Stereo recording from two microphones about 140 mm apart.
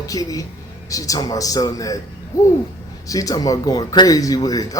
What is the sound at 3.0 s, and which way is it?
A man's voice, 25° left (ahead or behind).